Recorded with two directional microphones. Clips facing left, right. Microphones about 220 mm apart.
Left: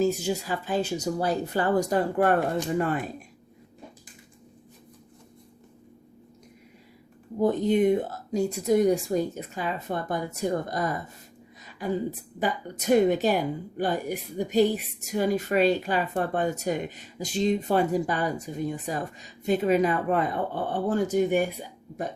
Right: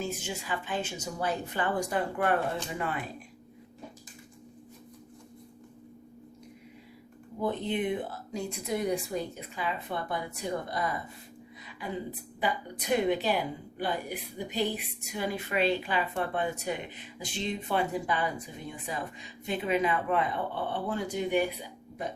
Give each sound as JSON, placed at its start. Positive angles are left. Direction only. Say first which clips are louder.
{"t": 0.0, "sound": "a woman's voice", "louder": "left 10 dB", "side_deg": 40}
{"t": 7.3, "sound": "a woman's voice", "louder": "left 8 dB", "side_deg": 45}
{"t": 12.4, "sound": "a woman's voice", "louder": "left 3 dB", "side_deg": 45}